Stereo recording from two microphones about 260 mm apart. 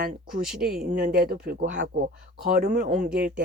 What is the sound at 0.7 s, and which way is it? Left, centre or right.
Speech, right.